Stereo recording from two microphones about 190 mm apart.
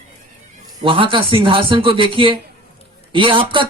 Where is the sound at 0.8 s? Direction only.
25° right (ahead or behind).